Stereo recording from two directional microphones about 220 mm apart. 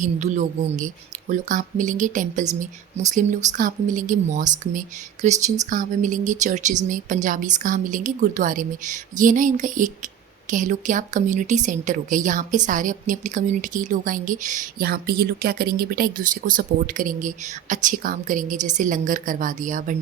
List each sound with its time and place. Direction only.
0.0 s speech: 35° right (ahead or behind)